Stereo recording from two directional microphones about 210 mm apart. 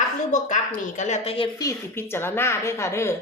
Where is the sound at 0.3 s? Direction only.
35° left (ahead or behind).